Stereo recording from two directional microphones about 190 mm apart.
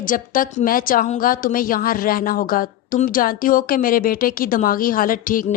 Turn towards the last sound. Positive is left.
turn(degrees=45)  # may be behind; listen again after turning